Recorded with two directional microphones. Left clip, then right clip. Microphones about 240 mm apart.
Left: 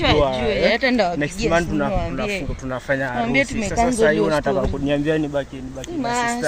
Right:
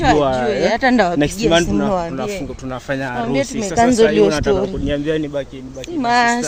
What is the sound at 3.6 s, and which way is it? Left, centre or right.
Speech, right.